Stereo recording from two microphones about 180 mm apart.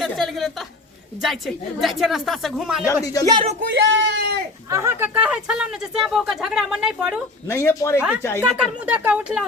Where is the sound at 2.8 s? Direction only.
20° left (ahead or behind).